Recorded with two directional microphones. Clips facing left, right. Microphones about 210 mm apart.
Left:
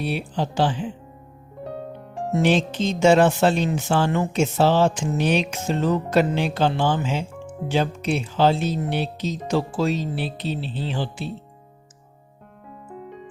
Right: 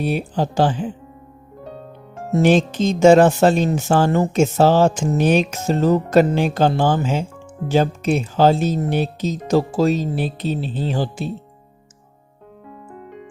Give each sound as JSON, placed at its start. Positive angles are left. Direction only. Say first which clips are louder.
{"t": 0.0, "sound": "speech", "louder": "right 5 dB", "side_deg": -45}
{"t": 2.3, "sound": "speech", "louder": "right 5 dB", "side_deg": -45}